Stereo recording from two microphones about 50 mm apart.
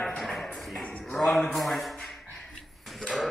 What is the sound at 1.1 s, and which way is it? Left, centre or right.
Speech, centre.